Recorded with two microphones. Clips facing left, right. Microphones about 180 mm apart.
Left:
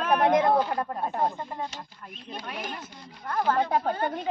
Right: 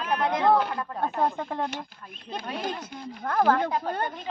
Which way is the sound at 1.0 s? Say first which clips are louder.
Right 2 dB; 85° right.